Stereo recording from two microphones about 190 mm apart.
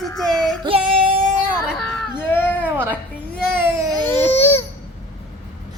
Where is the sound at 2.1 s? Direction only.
10° left (ahead or behind).